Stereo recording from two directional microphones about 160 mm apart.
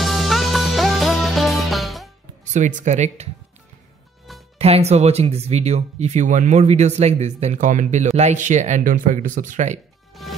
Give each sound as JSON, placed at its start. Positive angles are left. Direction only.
{"t": 0.0, "sound": "music", "side_deg": 0}
{"t": 2.5, "sound": "speech", "side_deg": -50}
{"t": 4.6, "sound": "speech", "side_deg": -40}
{"t": 10.2, "sound": "music", "side_deg": 0}